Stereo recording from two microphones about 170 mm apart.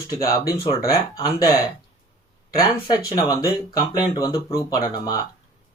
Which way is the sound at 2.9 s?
20° left (ahead or behind).